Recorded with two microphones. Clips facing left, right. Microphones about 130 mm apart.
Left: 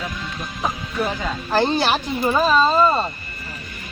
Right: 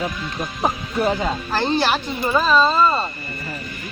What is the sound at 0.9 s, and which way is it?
Speech, 25° right (ahead or behind).